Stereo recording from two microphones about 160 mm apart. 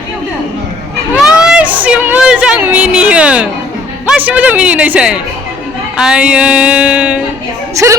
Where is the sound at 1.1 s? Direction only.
5° right (ahead or behind).